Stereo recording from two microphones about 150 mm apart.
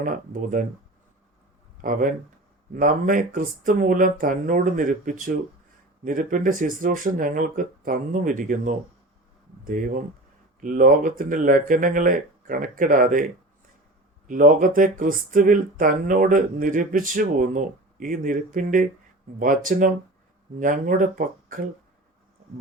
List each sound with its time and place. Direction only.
0.0 s speech: 65° right (ahead or behind)
1.8 s speech: 65° right (ahead or behind)
14.3 s speech: 65° right (ahead or behind)